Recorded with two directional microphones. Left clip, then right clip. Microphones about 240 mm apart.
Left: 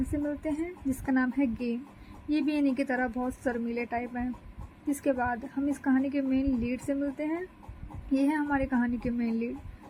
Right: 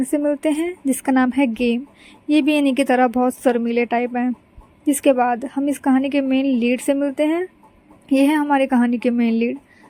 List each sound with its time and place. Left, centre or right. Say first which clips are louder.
0.1 s a woman's voice: right 13 dB; right